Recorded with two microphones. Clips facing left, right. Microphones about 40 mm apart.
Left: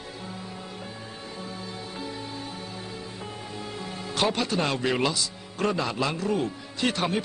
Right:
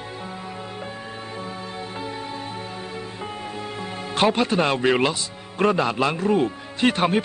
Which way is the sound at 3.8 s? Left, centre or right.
Right.